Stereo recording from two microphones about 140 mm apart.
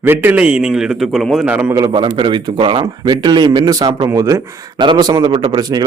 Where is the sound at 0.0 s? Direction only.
15° right (ahead or behind).